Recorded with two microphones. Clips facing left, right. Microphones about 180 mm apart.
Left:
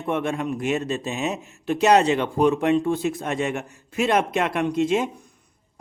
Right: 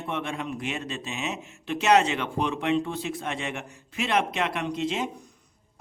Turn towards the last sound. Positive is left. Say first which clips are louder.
# left 7 dB
turn(degrees=50)  # may be behind; listen again after turning